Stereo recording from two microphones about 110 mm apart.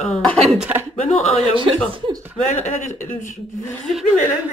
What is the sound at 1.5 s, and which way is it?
Speech, 55° right (ahead or behind).